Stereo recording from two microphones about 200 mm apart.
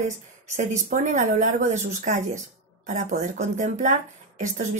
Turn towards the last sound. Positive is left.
turn(degrees=-40)  # may be behind; listen again after turning